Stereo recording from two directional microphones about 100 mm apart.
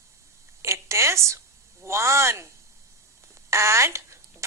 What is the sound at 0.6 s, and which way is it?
A woman's voice, 30° right (ahead or behind).